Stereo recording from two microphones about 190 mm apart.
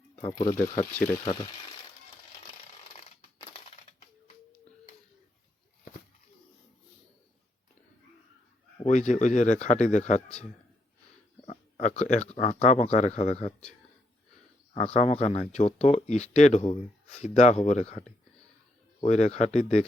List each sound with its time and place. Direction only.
0.2 s speech: 30° left (ahead or behind)
0.9 s speech: 5° left (ahead or behind)
1.2 s speech: 35° left (ahead or behind)
3.0 s coin: 35° left (ahead or behind)
8.8 s speech: 40° left (ahead or behind)
11.4 s speech: 40° left (ahead or behind)
14.7 s speech: 35° left (ahead or behind)
19.0 s speech: 35° left (ahead or behind)